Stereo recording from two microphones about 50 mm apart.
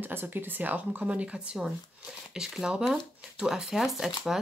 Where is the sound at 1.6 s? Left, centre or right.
Centre.